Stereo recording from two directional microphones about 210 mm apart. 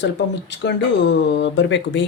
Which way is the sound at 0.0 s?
55° left (ahead or behind).